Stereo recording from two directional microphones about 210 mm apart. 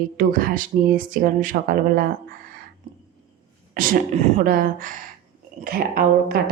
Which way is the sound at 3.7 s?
40° right (ahead or behind).